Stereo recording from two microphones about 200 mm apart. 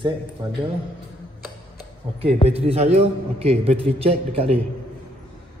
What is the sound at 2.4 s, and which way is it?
A man's voice, 30° right (ahead or behind).